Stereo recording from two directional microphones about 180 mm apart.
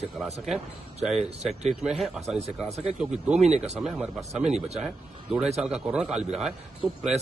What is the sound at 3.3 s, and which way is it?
Speech, 35° right (ahead or behind).